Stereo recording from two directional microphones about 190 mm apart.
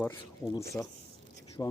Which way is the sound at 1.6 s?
15° left (ahead or behind).